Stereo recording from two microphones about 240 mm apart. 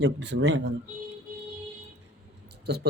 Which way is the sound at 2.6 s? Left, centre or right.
Right.